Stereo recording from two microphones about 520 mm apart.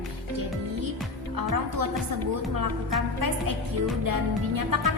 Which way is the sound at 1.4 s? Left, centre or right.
Right.